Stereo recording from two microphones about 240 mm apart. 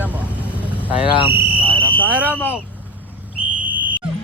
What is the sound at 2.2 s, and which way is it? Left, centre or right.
Speech, centre.